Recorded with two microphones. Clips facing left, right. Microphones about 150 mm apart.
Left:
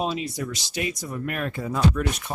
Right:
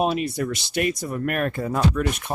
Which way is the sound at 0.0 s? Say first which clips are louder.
Right 5 dB; 60° right (ahead or behind).